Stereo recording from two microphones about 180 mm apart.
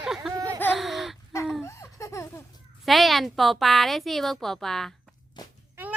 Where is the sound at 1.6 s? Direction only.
15° left (ahead or behind).